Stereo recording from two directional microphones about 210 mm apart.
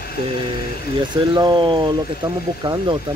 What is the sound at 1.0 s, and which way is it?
Speech, 20° right (ahead or behind).